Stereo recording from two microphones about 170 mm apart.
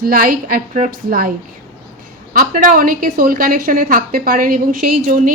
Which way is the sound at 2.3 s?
55° right (ahead or behind).